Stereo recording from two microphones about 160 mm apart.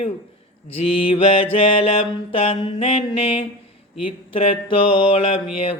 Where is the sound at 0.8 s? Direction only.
35° left (ahead or behind).